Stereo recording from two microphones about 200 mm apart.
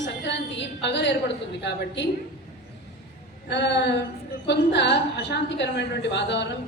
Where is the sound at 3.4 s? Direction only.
60° left (ahead or behind).